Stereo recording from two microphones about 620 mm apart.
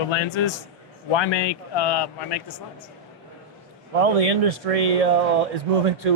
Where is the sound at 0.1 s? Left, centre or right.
Left.